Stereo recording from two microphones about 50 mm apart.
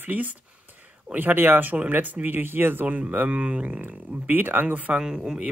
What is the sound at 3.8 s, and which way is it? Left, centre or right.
Speech, right.